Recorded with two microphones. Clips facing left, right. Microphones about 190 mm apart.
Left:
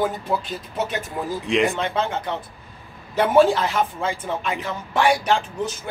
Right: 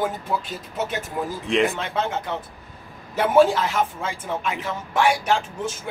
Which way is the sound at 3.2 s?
5° right (ahead or behind).